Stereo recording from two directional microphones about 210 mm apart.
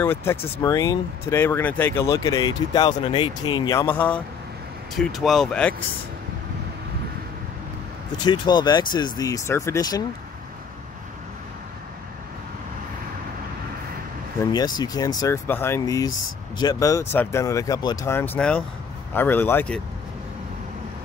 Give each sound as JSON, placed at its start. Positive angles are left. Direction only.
{"t": 0.0, "sound": "speech", "side_deg": 10}
{"t": 8.2, "sound": "speech", "side_deg": 20}
{"t": 14.4, "sound": "speech", "side_deg": 20}